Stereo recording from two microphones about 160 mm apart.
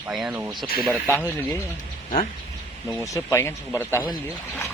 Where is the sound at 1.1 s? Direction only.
15° left (ahead or behind).